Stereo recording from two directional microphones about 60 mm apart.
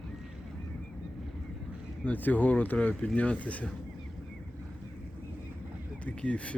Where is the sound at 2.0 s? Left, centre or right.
Left.